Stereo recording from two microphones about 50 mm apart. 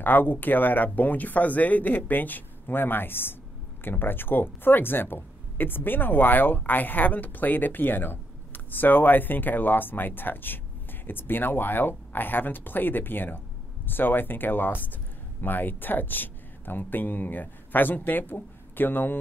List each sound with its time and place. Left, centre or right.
0.0 s speech: left